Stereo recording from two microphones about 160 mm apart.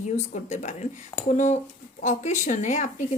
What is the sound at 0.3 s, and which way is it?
Speech, 50° left (ahead or behind).